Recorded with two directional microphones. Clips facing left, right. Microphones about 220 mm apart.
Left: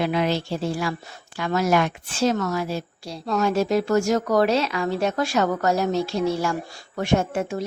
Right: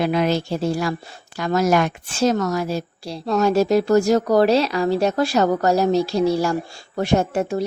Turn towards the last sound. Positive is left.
turn(degrees=-35)  # may be behind; listen again after turning